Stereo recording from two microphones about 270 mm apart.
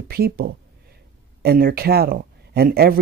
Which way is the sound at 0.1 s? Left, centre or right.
Right.